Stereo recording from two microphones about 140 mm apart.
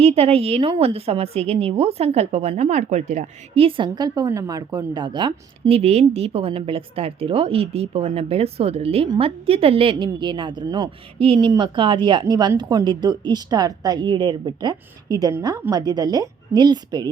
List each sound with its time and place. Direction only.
0.0 s a woman's voice: 45° right (ahead or behind)